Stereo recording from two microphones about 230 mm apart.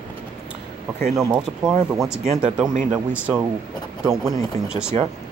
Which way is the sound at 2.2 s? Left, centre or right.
Right.